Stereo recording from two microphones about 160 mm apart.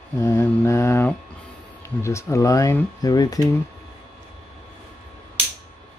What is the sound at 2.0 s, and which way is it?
Speech, 20° left (ahead or behind).